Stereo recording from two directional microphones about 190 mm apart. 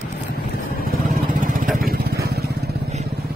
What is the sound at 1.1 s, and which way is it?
Vehicle, 45° right (ahead or behind).